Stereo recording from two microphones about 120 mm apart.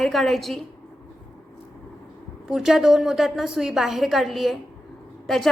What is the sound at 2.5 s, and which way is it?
A woman's voice, 5° right (ahead or behind).